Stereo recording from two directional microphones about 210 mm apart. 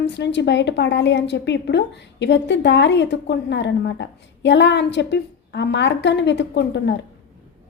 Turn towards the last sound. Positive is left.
turn(degrees=55)  # may be behind; listen again after turning